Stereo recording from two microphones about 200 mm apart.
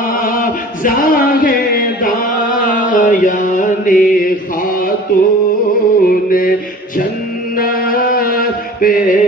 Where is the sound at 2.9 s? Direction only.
40° left (ahead or behind).